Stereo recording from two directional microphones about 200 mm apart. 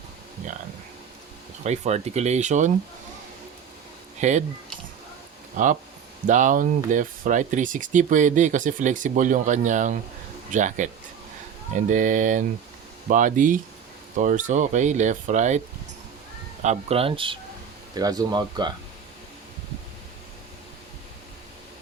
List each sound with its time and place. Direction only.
1.6 s speech: 35° right (ahead or behind)
4.2 s speech: 35° right (ahead or behind)
5.6 s speech: 40° right (ahead or behind)
16.6 s speech: 30° right (ahead or behind)